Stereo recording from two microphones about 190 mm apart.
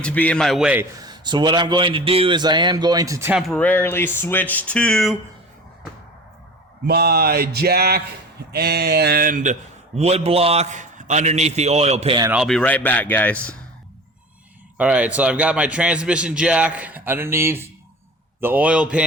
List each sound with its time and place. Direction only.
0.0 s a man's voice: 5° left (ahead or behind)
0.9 s a man's voice: 20° right (ahead or behind)
3.4 s speech: 5° left (ahead or behind)
6.8 s a man's voice: 60° right (ahead or behind); by 12.2 s 30° right (ahead or behind)
12.3 s speech: centre (ahead or behind)
14.8 s a man's voice: 5° right (ahead or behind)